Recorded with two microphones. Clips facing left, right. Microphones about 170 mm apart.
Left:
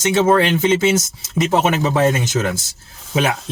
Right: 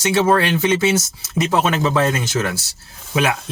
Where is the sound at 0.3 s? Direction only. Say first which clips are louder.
Left 2 dB; 25° left (ahead or behind).